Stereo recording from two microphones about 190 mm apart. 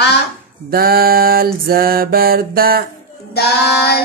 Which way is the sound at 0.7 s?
50° right (ahead or behind).